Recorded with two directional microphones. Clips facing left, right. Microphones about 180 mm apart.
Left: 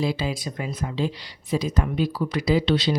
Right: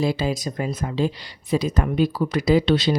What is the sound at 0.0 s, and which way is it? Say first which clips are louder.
Speech: right 3 dB; 45° right (ahead or behind).